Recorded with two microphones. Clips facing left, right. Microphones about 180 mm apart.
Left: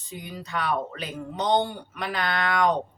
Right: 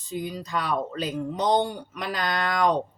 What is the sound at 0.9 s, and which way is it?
Speech, 35° right (ahead or behind).